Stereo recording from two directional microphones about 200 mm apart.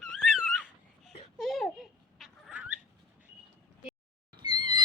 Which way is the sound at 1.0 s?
Centre (ahead or behind).